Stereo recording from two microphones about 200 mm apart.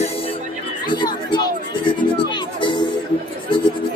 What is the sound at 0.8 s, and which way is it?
Speech, 20° left (ahead or behind).